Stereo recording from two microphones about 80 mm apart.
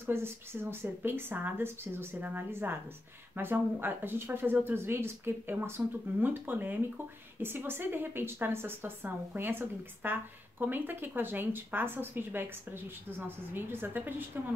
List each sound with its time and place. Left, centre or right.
0.0 s a woman's voice: right